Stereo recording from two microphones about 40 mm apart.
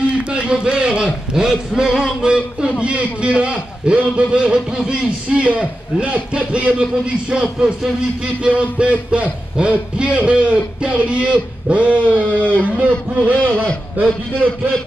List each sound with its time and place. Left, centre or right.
0.3 s a man's voice: right; by 2.1 s centre
2.2 s a man's voice: right
5.4 s a man's voice: right; by 7.7 s centre
8.7 s a man's voice: right
13.4 s a man's voice: left